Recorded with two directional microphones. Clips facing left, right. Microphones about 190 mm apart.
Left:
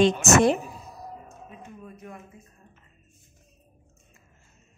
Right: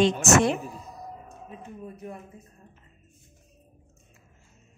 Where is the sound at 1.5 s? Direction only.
30° right (ahead or behind).